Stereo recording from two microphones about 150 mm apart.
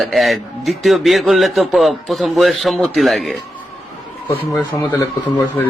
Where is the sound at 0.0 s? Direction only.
Centre (ahead or behind).